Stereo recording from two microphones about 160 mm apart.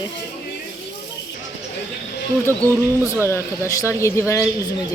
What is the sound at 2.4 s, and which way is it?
A woman's voice, 15° left (ahead or behind).